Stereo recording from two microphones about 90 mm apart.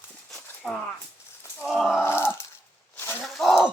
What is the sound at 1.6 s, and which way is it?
Roar, centre (ahead or behind).